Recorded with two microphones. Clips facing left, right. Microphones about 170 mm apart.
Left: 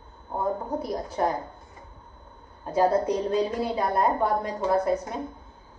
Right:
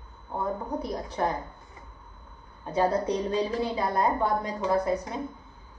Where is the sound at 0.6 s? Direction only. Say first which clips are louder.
Left 2 dB; 5° left (ahead or behind).